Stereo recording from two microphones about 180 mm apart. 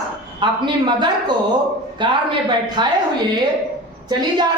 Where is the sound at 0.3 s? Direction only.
25° right (ahead or behind).